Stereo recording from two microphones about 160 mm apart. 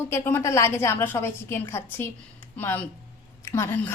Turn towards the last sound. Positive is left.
turn(degrees=15)  # may be behind; listen again after turning